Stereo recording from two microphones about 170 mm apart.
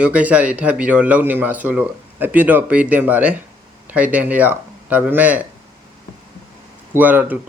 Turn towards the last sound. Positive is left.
turn(degrees=-10)  # may be behind; listen again after turning